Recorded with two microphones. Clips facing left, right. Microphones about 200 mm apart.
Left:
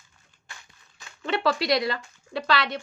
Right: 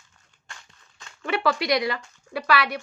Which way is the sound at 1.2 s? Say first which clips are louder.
Even; 25° left (ahead or behind).